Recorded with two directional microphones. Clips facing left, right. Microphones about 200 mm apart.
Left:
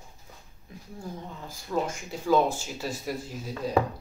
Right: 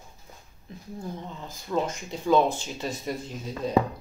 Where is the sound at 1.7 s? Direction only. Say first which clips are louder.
Right 1 dB; 5° left (ahead or behind).